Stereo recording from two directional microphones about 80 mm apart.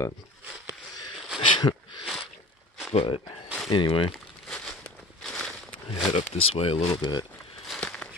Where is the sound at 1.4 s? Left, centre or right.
Left.